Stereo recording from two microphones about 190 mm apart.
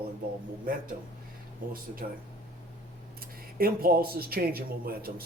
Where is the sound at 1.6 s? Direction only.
45° right (ahead or behind).